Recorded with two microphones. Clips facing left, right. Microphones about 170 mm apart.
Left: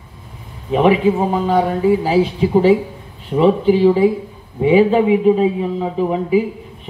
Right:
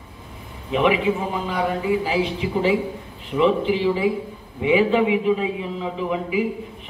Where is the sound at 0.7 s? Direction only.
40° left (ahead or behind).